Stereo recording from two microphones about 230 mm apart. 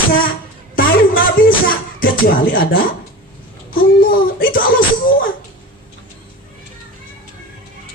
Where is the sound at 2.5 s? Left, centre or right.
Left.